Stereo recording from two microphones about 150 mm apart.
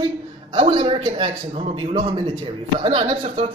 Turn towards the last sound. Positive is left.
turn(degrees=-40)  # may be behind; listen again after turning